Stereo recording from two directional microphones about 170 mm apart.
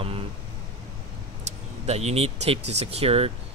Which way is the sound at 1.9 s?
40° right (ahead or behind).